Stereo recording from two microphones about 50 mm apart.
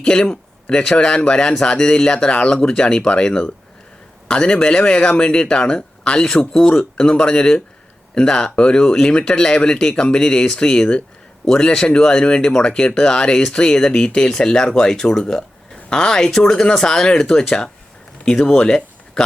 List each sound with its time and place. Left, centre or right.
0.0 s speech: centre